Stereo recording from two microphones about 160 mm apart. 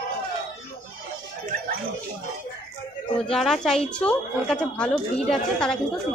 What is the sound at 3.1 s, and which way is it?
A woman's voice, centre (ahead or behind).